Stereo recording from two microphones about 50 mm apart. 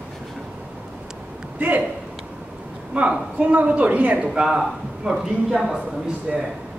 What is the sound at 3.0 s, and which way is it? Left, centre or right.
Speech, right.